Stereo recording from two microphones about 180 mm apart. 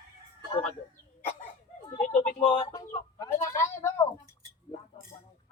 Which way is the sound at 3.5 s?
15° left (ahead or behind).